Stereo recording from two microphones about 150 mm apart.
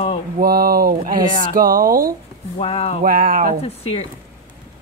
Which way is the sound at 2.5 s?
40° left (ahead or behind).